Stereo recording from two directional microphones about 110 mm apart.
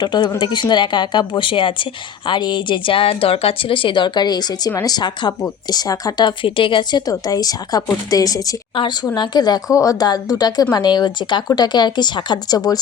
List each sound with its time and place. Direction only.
0.0 s a woman's voice: 40° left (ahead or behind)
8.7 s a woman's voice: 45° left (ahead or behind)